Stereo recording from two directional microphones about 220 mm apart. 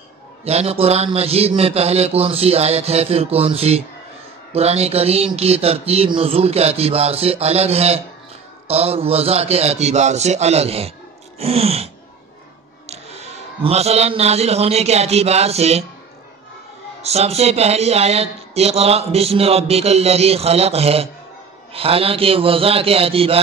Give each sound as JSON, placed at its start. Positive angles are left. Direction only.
{"t": 0.5, "sound": "speech", "side_deg": -30}
{"t": 17.0, "sound": "speech", "side_deg": -30}